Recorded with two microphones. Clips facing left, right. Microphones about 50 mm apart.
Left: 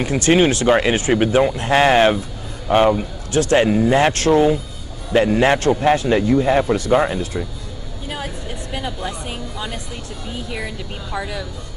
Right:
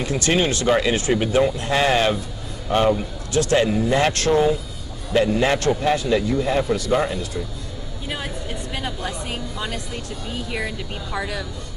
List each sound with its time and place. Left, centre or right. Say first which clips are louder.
0.0 s speech: left 5 dB; left
2.7 s speech: left 4 dB; left
11.1 s speech: left 1 dB; centre